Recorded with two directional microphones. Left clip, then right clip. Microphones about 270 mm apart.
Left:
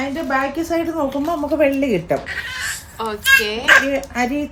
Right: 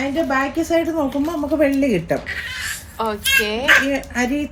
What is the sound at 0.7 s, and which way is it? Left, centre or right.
A woman's voice, centre.